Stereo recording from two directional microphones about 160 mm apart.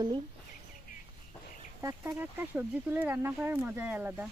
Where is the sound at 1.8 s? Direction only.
20° right (ahead or behind).